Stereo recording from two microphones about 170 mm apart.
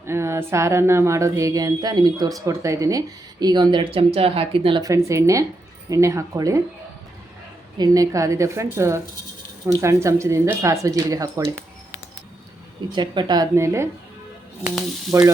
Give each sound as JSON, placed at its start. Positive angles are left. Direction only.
{"t": 0.0, "sound": "a woman's voice", "side_deg": -15}
{"t": 7.8, "sound": "a woman's voice", "side_deg": -20}
{"t": 12.9, "sound": "speech", "side_deg": -25}
{"t": 15.1, "sound": "a woman's voice", "side_deg": -15}